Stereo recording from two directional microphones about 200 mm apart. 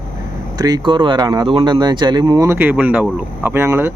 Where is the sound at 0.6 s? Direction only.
20° right (ahead or behind).